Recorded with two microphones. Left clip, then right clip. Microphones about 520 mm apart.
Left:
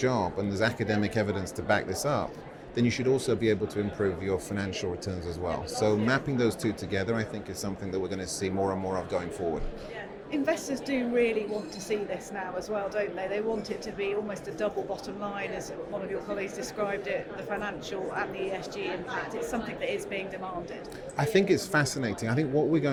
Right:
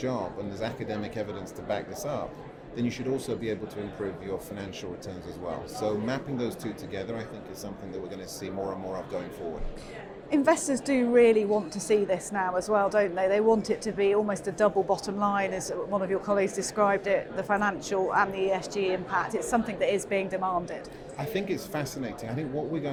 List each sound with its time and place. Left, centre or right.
0.0 s speech: left
10.3 s speech: right
21.2 s speech: left